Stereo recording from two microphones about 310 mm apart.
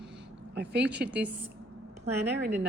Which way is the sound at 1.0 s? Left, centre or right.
Right.